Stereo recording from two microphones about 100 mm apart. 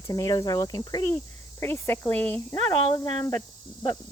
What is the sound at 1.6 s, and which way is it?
Speech, 25° left (ahead or behind).